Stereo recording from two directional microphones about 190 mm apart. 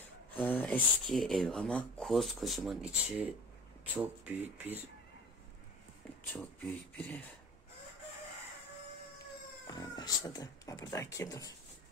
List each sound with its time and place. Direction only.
0.3 s speech: 10° left (ahead or behind); by 4.7 s 10° right (ahead or behind)
6.3 s speech: 10° left (ahead or behind)
9.7 s speech: 20° left (ahead or behind)